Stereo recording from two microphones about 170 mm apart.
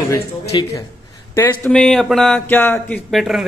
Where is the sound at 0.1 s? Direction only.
20° left (ahead or behind).